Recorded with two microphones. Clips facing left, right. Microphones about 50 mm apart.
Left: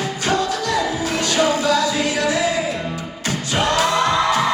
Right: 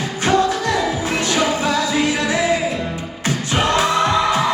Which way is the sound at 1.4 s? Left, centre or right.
Right.